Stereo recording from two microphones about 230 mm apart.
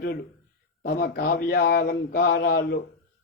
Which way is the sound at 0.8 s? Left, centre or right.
Left.